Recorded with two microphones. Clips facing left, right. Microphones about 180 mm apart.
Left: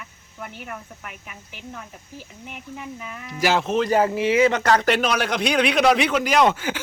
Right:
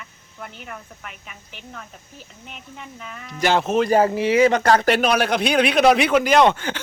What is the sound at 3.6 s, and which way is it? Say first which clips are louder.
Speech: right 2 dB; 45° right (ahead or behind).